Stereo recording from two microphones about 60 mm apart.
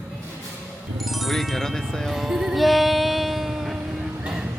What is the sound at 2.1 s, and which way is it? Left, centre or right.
Music, centre.